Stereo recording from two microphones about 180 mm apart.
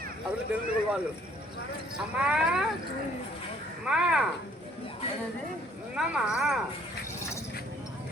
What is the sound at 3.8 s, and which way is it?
Speech, 5° right (ahead or behind).